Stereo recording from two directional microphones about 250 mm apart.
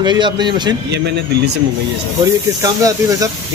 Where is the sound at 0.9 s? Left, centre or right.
Right.